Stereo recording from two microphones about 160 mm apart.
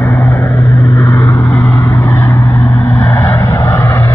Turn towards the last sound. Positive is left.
turn(degrees=20)  # may be behind; listen again after turning